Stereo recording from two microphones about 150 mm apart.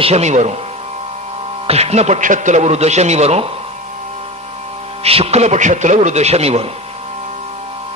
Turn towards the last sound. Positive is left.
turn(degrees=-45)  # may be behind; listen again after turning